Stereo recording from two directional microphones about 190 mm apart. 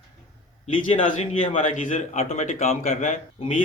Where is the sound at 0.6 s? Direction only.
40° left (ahead or behind).